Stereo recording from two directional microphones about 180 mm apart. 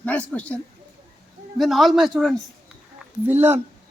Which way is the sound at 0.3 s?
5° left (ahead or behind).